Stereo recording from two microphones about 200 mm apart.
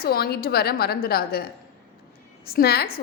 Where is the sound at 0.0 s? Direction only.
50° left (ahead or behind).